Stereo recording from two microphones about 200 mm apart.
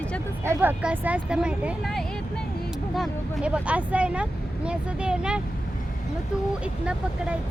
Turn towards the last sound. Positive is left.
turn(degrees=-5)  # may be behind; listen again after turning